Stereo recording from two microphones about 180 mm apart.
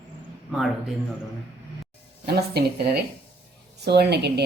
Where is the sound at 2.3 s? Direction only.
65° right (ahead or behind).